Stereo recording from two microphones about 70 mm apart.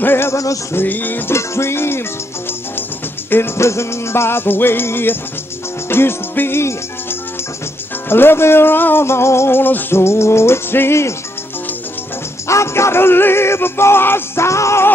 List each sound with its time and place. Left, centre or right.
0.0 s music: left
1.3 s music: left
3.3 s music: left
8.1 s music: left
12.4 s music: left